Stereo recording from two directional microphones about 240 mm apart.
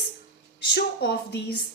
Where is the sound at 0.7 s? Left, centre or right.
Left.